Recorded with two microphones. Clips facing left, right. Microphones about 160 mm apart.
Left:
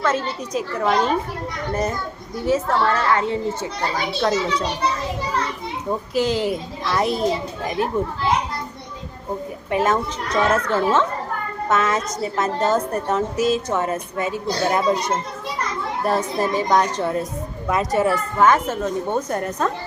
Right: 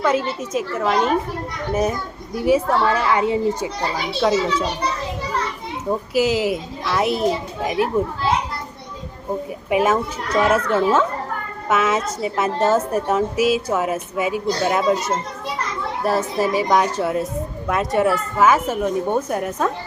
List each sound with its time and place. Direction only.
0.0 s a woman's voice: 15° right (ahead or behind)
0.5 s speech: 5° right (ahead or behind)
2.3 s a woman's voice: 10° right (ahead or behind)
5.9 s speech: 5° right (ahead or behind)
9.6 s a woman's voice: 10° right (ahead or behind)